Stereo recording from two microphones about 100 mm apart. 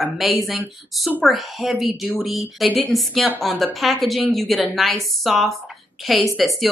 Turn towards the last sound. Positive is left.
turn(degrees=0)  # may be behind; listen again after turning